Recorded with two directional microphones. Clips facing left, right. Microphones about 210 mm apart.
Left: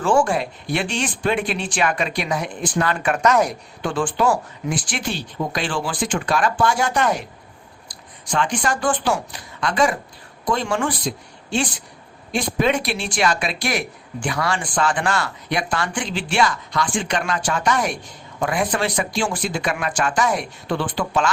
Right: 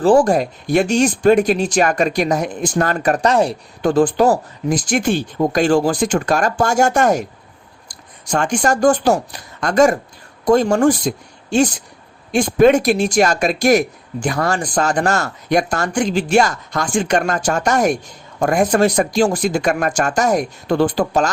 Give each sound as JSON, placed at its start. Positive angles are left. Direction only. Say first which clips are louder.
{"t": 0.0, "sound": "speech", "louder": "right 6 dB", "side_deg": -35}